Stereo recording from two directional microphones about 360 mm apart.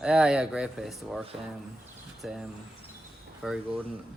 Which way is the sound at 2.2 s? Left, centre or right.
Centre.